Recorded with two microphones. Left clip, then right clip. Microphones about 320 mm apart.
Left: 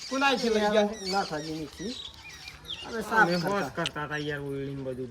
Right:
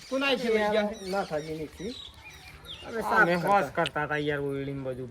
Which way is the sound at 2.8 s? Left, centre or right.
Centre.